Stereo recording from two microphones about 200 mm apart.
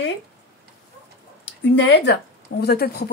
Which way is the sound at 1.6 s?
60° left (ahead or behind).